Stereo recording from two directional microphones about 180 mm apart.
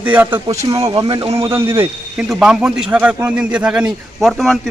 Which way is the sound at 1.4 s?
15° right (ahead or behind).